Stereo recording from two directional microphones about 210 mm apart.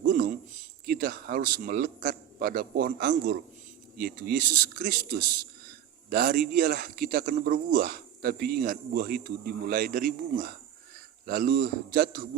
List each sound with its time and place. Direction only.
0.0 s a sound: 40° right (ahead or behind)
0.9 s a man's voice: 45° right (ahead or behind)
6.1 s a man's voice: 45° right (ahead or behind)